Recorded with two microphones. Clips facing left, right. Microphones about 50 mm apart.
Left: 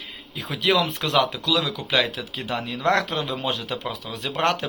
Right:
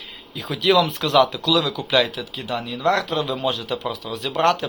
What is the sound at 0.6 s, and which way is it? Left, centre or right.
Speech, left.